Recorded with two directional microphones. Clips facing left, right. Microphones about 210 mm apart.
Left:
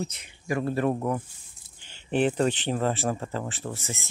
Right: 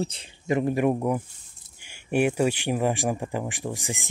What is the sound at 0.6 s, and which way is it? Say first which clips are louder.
Speech: right 2 dB; 15° right (ahead or behind).